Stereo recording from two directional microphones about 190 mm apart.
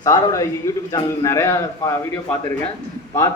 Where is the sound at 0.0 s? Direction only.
15° left (ahead or behind).